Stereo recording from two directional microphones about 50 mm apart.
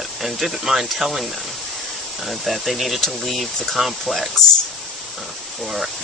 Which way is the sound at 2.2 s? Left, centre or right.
Centre.